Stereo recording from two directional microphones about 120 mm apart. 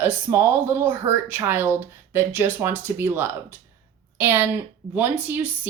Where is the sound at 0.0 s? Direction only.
20° right (ahead or behind).